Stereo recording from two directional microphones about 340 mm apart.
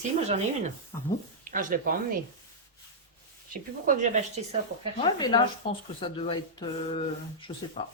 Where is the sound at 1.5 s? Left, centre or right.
Right.